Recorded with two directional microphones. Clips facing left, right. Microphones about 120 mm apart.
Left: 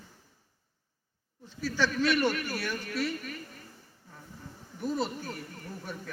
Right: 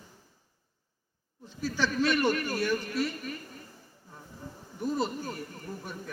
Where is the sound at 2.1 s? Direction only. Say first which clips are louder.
Right 1 dB; 45° right (ahead or behind).